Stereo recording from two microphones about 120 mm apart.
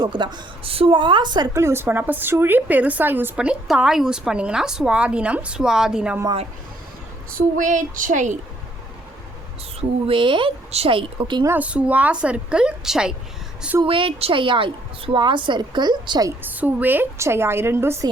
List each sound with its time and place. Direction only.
0.0 s a woman's voice: 40° right (ahead or behind)
1.5 s a woman's voice: 20° right (ahead or behind); by 6.1 s 5° right (ahead or behind)
7.5 s speech: 90° right
10.1 s a woman's voice: 45° right (ahead or behind)
10.7 s a woman's voice: 55° right (ahead or behind)
11.4 s a woman's voice: 15° right (ahead or behind)
13.8 s a woman's voice: 45° right (ahead or behind)
16.4 s a woman's voice: 15° right (ahead or behind)